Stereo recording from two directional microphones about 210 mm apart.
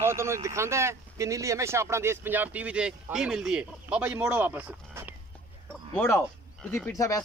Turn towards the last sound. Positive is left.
turn(degrees=5)  # may be behind; listen again after turning